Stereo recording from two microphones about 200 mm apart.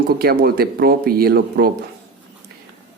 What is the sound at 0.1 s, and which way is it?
A man's voice, 50° right (ahead or behind).